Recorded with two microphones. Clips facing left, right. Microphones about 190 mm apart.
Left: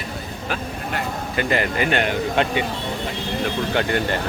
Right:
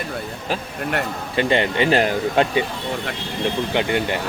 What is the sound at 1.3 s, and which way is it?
A man's voice, 25° right (ahead or behind).